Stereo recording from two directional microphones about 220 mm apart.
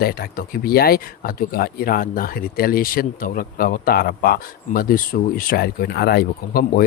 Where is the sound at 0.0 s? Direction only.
45° left (ahead or behind).